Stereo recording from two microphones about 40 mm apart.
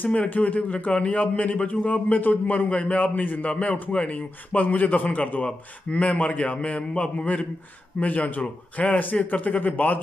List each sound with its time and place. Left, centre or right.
0.3 s a man's voice: left
2.5 s a man's voice: left
3.5 s a man's voice: left
8.0 s a man's voice: left